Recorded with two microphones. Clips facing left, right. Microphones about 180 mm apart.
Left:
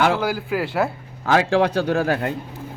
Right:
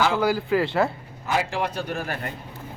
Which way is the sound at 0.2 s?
5° left (ahead or behind).